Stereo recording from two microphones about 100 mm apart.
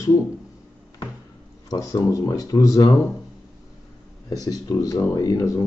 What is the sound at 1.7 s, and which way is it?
Speech, 35° left (ahead or behind).